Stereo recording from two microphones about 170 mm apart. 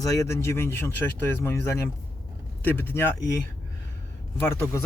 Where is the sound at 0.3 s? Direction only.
15° left (ahead or behind).